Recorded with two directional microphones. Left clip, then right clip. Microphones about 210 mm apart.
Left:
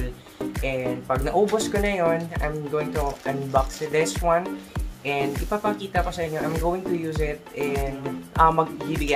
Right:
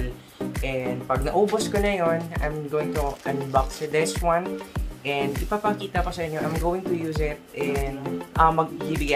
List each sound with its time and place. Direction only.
0.6 s speech: 5° right (ahead or behind)